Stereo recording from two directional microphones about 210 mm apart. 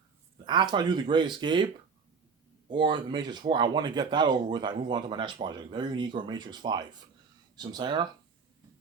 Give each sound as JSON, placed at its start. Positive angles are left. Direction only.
{"t": 0.4, "sound": "speech", "side_deg": -20}
{"t": 2.7, "sound": "speech", "side_deg": -20}